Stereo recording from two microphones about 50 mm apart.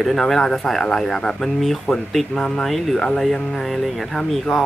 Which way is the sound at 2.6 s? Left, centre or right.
Centre.